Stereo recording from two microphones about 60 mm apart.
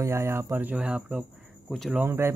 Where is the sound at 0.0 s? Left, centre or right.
Right.